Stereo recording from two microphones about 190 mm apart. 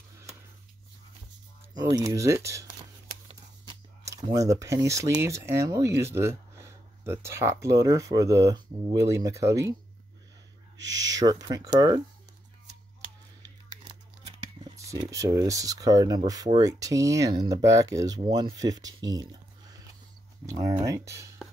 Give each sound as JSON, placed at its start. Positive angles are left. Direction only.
{"t": 1.7, "sound": "speech", "side_deg": -20}
{"t": 4.0, "sound": "speech", "side_deg": -20}
{"t": 10.8, "sound": "speech", "side_deg": -20}
{"t": 14.9, "sound": "speech", "side_deg": -15}
{"t": 20.4, "sound": "speech", "side_deg": -15}